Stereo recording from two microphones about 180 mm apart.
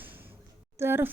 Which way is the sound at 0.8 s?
10° right (ahead or behind).